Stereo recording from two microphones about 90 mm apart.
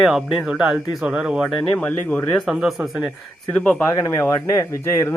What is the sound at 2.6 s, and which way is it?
Speech, centre (ahead or behind).